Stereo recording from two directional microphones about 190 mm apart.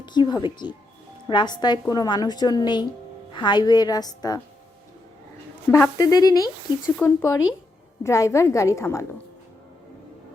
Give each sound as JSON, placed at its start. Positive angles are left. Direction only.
{"t": 0.0, "sound": "a woman's voice", "side_deg": 25}
{"t": 5.7, "sound": "a woman's voice", "side_deg": 15}